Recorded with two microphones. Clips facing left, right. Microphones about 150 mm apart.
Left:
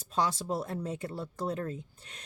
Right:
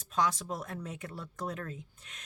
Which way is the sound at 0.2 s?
30° left (ahead or behind).